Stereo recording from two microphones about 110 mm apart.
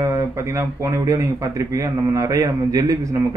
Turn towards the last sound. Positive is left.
turn(degrees=-30)  # may be behind; listen again after turning